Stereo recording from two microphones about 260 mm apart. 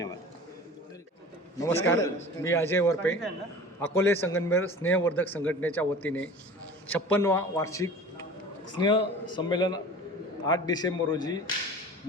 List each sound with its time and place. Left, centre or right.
1.5 s a man's voice: centre